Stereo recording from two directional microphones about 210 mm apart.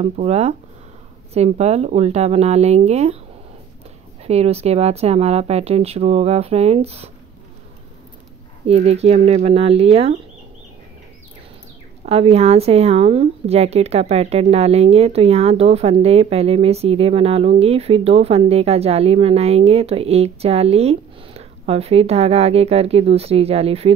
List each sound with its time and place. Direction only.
0.0 s speech: 30° right (ahead or behind)
4.2 s speech: 30° right (ahead or behind)
8.6 s speech: 30° right (ahead or behind)
12.1 s speech: 30° right (ahead or behind)